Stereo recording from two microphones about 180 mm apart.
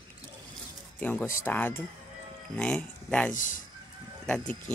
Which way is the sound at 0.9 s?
10° left (ahead or behind).